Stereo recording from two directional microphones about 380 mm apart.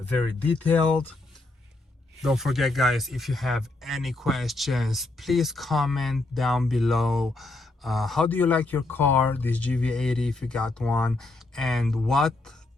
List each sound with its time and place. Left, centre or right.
0.4 s speech: centre
2.2 s speech: centre